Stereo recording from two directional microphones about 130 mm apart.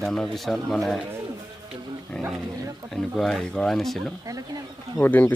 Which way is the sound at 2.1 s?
5° left (ahead or behind).